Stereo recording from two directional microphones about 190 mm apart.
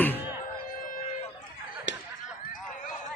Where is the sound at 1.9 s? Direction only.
70° left (ahead or behind).